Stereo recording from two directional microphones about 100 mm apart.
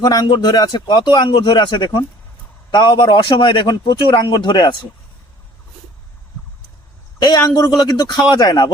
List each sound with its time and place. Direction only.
0.0 s a man's voice: 45° left (ahead or behind)
7.2 s a man's voice: 40° left (ahead or behind)